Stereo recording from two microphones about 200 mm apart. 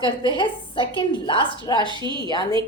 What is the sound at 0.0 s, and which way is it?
A woman's voice, 25° left (ahead or behind).